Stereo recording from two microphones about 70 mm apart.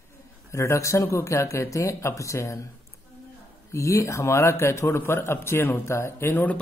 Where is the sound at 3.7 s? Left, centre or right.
Left.